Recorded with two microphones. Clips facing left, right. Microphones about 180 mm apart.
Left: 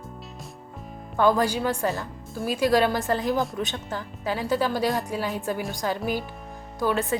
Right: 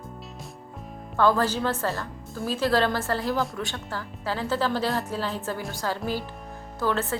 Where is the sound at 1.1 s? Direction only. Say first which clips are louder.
Left 1 dB; 15° left (ahead or behind).